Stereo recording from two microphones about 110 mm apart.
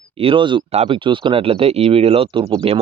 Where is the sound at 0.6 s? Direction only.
65° right (ahead or behind).